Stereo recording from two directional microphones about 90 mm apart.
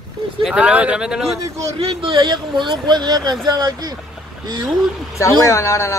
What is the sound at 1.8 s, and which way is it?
A man's voice, 75° right (ahead or behind).